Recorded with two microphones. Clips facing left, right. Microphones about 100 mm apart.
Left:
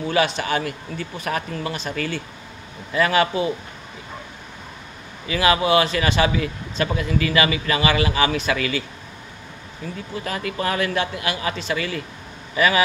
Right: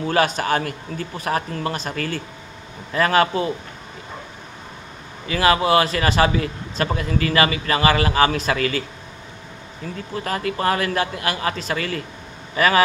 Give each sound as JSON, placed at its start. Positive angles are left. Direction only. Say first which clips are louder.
{"t": 0.1, "sound": "a man's voice", "louder": "right 2 dB", "side_deg": -45}
{"t": 5.3, "sound": "a man's voice", "louder": "right 1 dB", "side_deg": -35}